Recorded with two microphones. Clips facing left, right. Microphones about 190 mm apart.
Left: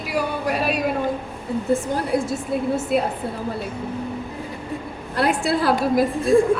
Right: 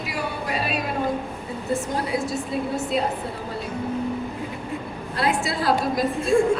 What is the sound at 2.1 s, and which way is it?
Speech, 60° left (ahead or behind).